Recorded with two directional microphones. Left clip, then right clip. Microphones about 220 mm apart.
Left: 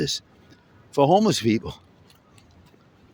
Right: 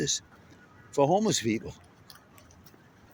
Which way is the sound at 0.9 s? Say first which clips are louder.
Left 6 dB; 30° left (ahead or behind).